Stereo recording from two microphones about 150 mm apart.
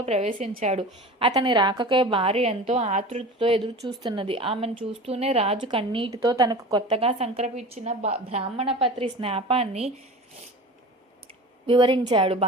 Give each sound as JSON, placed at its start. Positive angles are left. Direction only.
{"t": 0.0, "sound": "a woman's voice", "side_deg": -45}
{"t": 1.3, "sound": "a woman's voice", "side_deg": -30}
{"t": 6.2, "sound": "a woman's voice", "side_deg": -25}
{"t": 11.6, "sound": "a woman's voice", "side_deg": -30}